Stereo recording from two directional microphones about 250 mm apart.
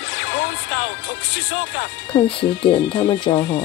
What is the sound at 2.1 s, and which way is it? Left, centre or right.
Speech, left.